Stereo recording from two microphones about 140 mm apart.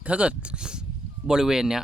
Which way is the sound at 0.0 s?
10° right (ahead or behind).